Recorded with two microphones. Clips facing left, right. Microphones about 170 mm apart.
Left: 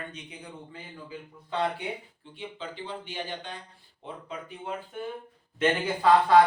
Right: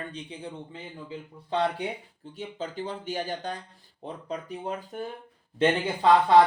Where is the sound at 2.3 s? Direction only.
40° right (ahead or behind).